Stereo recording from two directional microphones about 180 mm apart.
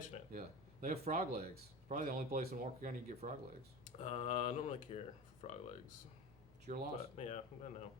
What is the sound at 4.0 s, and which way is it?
Speech, 35° left (ahead or behind).